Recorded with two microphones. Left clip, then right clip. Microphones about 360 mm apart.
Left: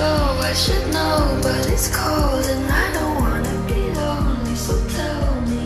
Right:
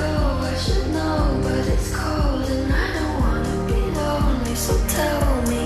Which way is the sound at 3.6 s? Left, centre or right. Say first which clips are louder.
Left 1 dB; centre.